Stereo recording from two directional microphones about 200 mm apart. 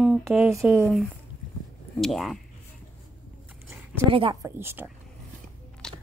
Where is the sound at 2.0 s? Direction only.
Centre (ahead or behind).